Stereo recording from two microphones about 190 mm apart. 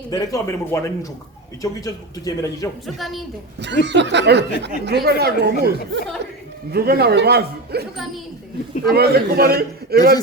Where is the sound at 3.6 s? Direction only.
65° right (ahead or behind).